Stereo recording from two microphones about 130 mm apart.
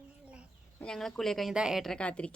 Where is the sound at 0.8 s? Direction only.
5° left (ahead or behind).